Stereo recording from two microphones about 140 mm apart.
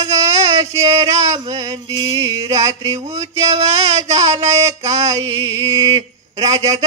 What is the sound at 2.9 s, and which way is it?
Mantra, 50° right (ahead or behind).